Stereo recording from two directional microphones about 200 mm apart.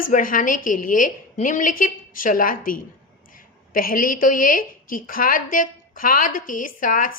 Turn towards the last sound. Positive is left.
turn(degrees=40)  # may be behind; listen again after turning